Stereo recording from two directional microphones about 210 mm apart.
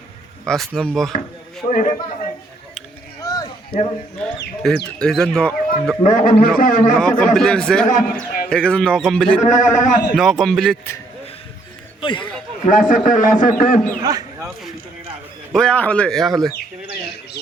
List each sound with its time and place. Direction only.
0.4 s speech: centre (ahead or behind)
1.6 s speech: 15° left (ahead or behind)
3.2 s a sound: 15° left (ahead or behind)
4.6 s speech: centre (ahead or behind)
6.0 s a man's voice: 40° left (ahead or behind)
6.9 s speech: 5° left (ahead or behind)
7.9 s a man's voice: 40° left (ahead or behind)
8.4 s speech: 5° left (ahead or behind)
9.4 s a man's voice: 35° left (ahead or behind)
10.2 s speech: centre (ahead or behind)
11.9 s speech: 25° left (ahead or behind)
12.6 s a man's voice: 40° left (ahead or behind)
14.0 s speech: 20° right (ahead or behind)
15.5 s speech: 5° left (ahead or behind)